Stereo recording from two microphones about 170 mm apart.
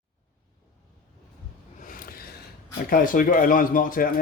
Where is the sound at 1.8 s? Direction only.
55° left (ahead or behind).